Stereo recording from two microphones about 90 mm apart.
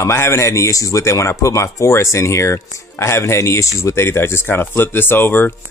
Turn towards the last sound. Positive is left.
turn(degrees=20)  # may be behind; listen again after turning